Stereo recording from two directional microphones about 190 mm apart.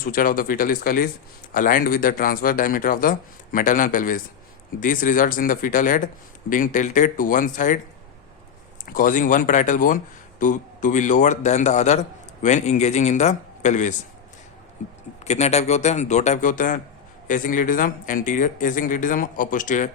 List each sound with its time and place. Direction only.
0.0 s speech: 50° left (ahead or behind)
8.9 s a man's voice: 45° left (ahead or behind)
15.2 s a man's voice: 35° left (ahead or behind)